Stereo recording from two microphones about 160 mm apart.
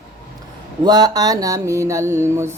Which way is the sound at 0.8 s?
25° right (ahead or behind).